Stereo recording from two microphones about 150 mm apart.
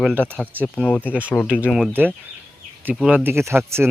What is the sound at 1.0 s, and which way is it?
Speech, 10° right (ahead or behind).